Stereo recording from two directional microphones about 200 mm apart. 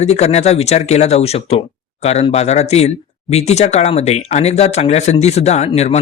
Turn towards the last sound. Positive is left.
turn(degrees=35)  # may be behind; listen again after turning